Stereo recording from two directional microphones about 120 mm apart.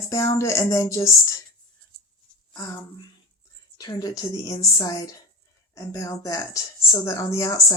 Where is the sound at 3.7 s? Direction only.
30° left (ahead or behind).